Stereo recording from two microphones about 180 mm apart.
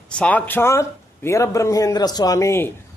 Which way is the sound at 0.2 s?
10° left (ahead or behind).